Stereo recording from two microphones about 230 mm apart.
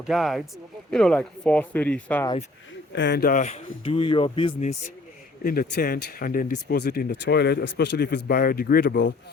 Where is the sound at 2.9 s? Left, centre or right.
Left.